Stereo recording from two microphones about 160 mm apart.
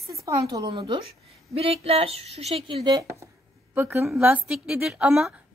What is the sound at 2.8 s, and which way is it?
A woman's voice, 20° right (ahead or behind).